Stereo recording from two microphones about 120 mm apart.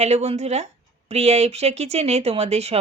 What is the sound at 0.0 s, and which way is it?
Speech, 65° right (ahead or behind).